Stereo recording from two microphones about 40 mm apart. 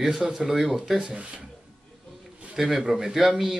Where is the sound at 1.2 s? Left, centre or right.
Right.